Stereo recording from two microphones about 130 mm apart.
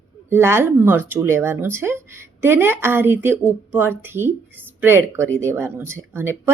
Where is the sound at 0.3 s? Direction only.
20° right (ahead or behind).